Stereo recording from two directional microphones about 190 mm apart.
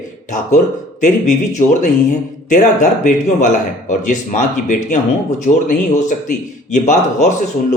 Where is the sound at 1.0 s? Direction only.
40° left (ahead or behind).